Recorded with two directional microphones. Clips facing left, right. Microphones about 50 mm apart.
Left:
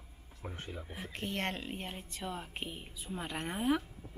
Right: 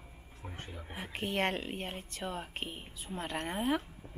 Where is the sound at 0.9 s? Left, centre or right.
Centre.